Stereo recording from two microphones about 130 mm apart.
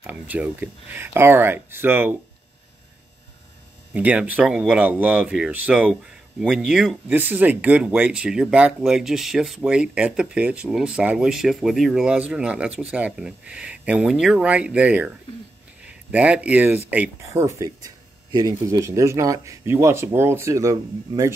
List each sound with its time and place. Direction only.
0.0 s speech: 10° right (ahead or behind)
3.9 s speech: 10° right (ahead or behind)
17.3 s speech: 20° right (ahead or behind)